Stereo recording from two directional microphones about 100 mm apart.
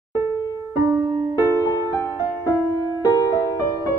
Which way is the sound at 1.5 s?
35° left (ahead or behind).